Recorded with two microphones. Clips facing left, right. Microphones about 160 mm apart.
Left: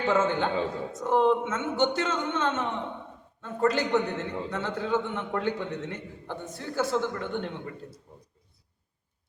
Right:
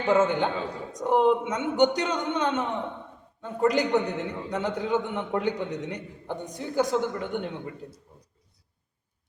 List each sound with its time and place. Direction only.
0.1 s a man's voice: 15° right (ahead or behind)